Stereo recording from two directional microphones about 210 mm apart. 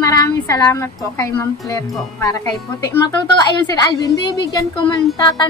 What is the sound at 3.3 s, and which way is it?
A woman's voice, 15° left (ahead or behind).